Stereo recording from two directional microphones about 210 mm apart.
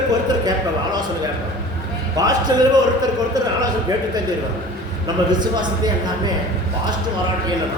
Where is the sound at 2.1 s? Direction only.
20° right (ahead or behind).